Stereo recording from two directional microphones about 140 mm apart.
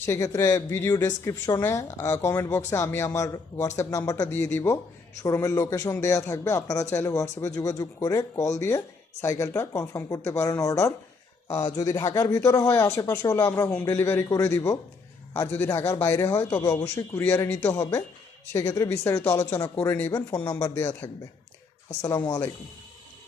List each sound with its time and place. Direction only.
0.0 s speech: 20° left (ahead or behind)
16.8 s a man's voice: 15° left (ahead or behind)